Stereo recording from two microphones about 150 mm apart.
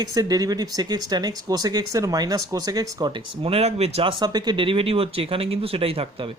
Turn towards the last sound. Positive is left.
turn(degrees=-40)  # may be behind; listen again after turning